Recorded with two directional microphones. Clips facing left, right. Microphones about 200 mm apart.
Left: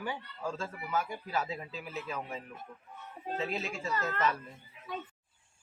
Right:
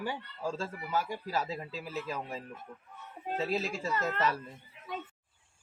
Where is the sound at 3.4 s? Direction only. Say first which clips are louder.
Right 4 dB; 35° right (ahead or behind).